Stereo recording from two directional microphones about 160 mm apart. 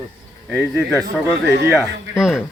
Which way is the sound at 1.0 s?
90° right.